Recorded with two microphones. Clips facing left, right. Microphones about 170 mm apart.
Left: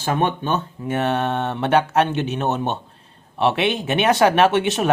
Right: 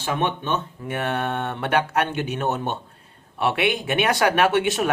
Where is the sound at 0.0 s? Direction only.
40° left (ahead or behind).